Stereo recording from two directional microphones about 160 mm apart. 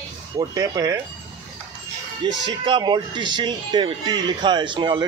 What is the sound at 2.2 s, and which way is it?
Speech, 30° right (ahead or behind).